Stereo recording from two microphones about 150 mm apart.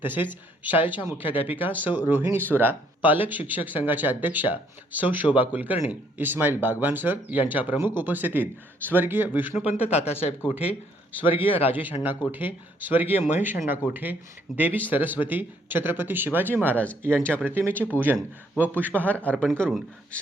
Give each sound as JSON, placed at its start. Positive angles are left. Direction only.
{"t": 0.0, "sound": "speech", "side_deg": -15}
{"t": 9.9, "sound": "speech", "side_deg": 45}
{"t": 10.5, "sound": "speech", "side_deg": -10}
{"t": 16.7, "sound": "speech", "side_deg": 10}
{"t": 17.5, "sound": "speech", "side_deg": -15}
{"t": 18.7, "sound": "speech", "side_deg": 10}